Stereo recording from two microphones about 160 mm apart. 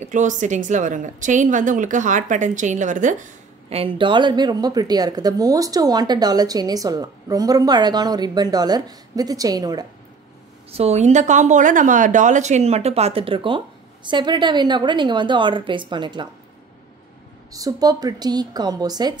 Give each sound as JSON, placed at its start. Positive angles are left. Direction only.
{"t": 0.0, "sound": "a woman's voice", "side_deg": -50}
{"t": 3.7, "sound": "a woman's voice", "side_deg": -35}
{"t": 10.7, "sound": "a woman's voice", "side_deg": -40}
{"t": 17.5, "sound": "a woman's voice", "side_deg": -20}